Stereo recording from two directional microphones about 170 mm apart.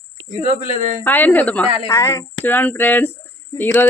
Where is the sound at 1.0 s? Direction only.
10° left (ahead or behind).